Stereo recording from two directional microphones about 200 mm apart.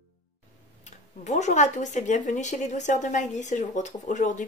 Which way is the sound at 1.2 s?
35° left (ahead or behind).